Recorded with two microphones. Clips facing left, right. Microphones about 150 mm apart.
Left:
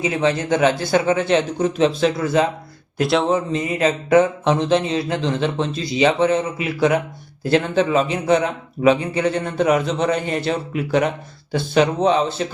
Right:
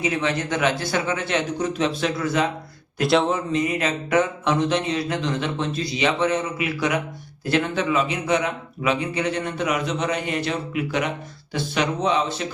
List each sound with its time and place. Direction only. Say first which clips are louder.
0.0 s speech: left 4 dB; 30° left (ahead or behind)
3.0 s speech: left 1 dB; centre (ahead or behind)
3.3 s a man's voice: left 2 dB; 30° left (ahead or behind)